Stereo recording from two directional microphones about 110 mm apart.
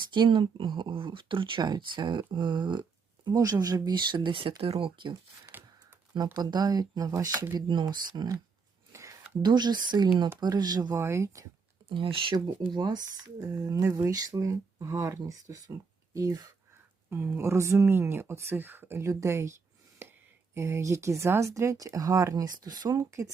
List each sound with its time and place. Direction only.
0.1 s speech: 45° right (ahead or behind)
5.5 s a sound: 20° right (ahead or behind)
6.3 s speech: 40° right (ahead or behind)
8.9 s a sound: 25° right (ahead or behind)
9.4 s speech: 40° right (ahead or behind)
10.9 s speech: 25° right (ahead or behind)
11.9 s speech: 55° right (ahead or behind); by 16.5 s 35° right (ahead or behind)
17.1 s speech: 20° right (ahead or behind)
20.0 s a sound: 20° right (ahead or behind)
20.5 s speech: 25° right (ahead or behind)